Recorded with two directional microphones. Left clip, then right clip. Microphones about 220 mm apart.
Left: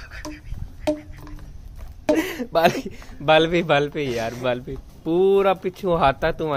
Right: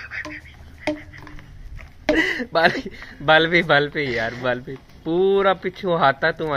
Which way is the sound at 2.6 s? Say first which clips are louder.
Even; 15° left (ahead or behind).